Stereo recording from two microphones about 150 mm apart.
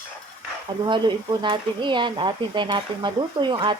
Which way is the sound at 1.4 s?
30° right (ahead or behind).